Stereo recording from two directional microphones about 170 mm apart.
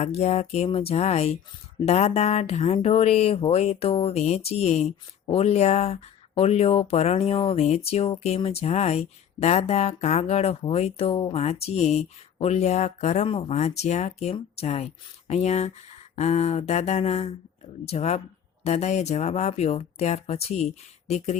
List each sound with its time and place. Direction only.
0.0 s speech: 40° left (ahead or behind)